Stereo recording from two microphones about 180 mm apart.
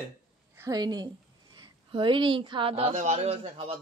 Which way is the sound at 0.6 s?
20° right (ahead or behind).